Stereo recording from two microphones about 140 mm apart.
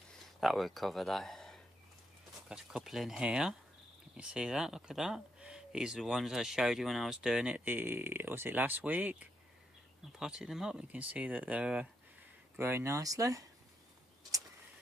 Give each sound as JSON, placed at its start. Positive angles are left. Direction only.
{"t": 0.1, "sound": "speech", "side_deg": 0}